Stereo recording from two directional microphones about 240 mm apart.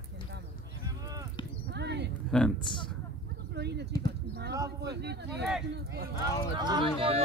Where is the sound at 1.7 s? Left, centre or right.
Right.